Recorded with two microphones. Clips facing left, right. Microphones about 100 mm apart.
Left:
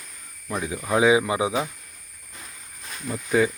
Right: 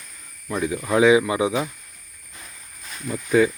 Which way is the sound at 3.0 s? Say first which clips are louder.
Right 3 dB; 20° left (ahead or behind).